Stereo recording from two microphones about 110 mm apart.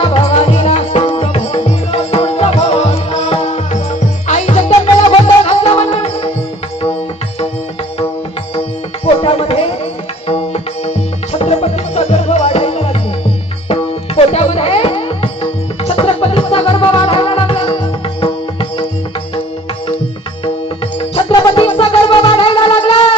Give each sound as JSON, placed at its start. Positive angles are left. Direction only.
{"t": 0.0, "sound": "music", "side_deg": 60}
{"t": 5.4, "sound": "music", "side_deg": 60}
{"t": 9.2, "sound": "tabla", "side_deg": 60}
{"t": 10.2, "sound": "music", "side_deg": 65}
{"t": 21.0, "sound": "music", "side_deg": 55}
{"t": 21.4, "sound": "a sound", "side_deg": 50}